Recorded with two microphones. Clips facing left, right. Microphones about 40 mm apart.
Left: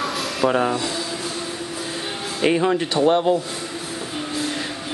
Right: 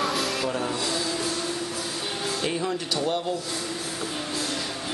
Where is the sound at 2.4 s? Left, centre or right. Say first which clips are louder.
Left 13 dB; left.